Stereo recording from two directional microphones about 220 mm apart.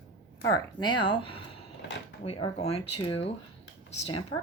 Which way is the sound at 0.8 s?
20° left (ahead or behind).